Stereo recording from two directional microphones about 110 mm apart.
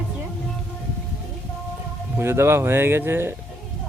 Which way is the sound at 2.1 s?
20° right (ahead or behind).